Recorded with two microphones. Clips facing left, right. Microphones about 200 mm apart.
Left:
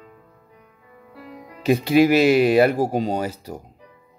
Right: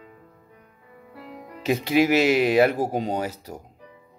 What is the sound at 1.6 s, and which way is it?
Speech, 20° right (ahead or behind).